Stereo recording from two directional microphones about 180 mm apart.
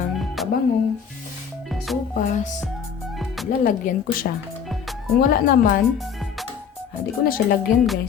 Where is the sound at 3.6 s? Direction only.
50° left (ahead or behind).